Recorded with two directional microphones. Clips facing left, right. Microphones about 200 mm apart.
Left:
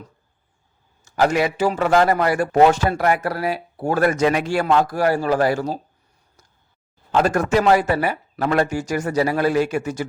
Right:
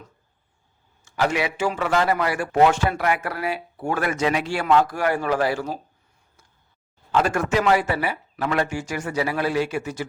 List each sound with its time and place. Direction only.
1.0 s a man's voice: 40° left (ahead or behind)
7.1 s speech: 40° left (ahead or behind)